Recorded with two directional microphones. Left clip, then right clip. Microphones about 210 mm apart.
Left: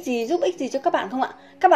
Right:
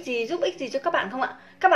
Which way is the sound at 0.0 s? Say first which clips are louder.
Left 3 dB; 35° left (ahead or behind).